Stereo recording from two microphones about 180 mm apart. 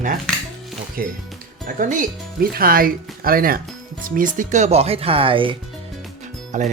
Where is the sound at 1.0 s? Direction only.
55° right (ahead or behind); by 5.5 s 30° right (ahead or behind).